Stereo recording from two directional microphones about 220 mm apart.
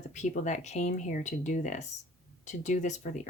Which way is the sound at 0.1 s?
35° left (ahead or behind).